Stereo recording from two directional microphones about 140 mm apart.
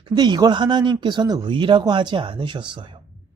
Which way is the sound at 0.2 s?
30° right (ahead or behind).